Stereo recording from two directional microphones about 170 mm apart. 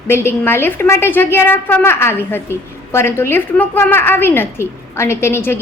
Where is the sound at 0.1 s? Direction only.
15° left (ahead or behind).